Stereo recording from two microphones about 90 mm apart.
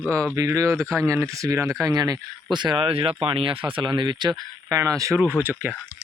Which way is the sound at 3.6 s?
65° right (ahead or behind).